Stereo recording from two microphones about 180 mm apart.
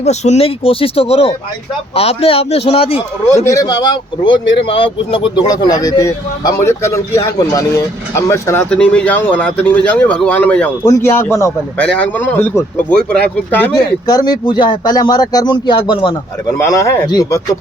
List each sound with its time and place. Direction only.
0.0 s speech: 40° left (ahead or behind)
3.4 s speech: 20° left (ahead or behind)
14.1 s speech: 20° left (ahead or behind)
16.6 s speech: 15° left (ahead or behind)